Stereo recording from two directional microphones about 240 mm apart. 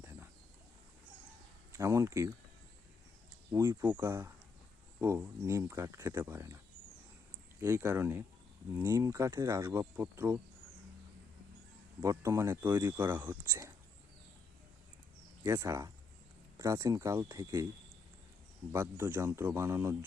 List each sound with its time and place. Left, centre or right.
0.0 s a sound: centre
1.7 s speech: centre
3.5 s speech: centre
7.6 s speech: centre
12.0 s speech: centre
15.4 s speech: centre
18.7 s speech: centre